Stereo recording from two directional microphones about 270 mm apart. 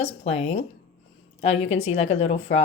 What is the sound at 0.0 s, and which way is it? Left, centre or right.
Speech, left.